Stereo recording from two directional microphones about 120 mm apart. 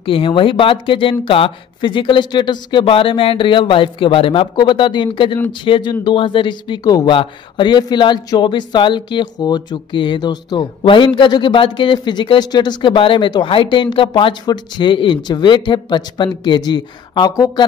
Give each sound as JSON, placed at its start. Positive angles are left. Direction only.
{"t": 0.0, "sound": "speech", "side_deg": 45}